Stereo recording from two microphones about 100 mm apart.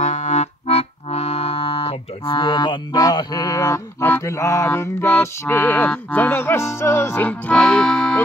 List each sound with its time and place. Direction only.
0.7 s speech: 90° left; by 7.6 s 15° left (ahead or behind)
7.6 s music: 5° left (ahead or behind)